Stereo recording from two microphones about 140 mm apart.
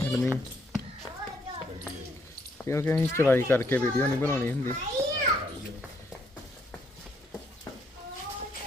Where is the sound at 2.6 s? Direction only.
20° left (ahead or behind).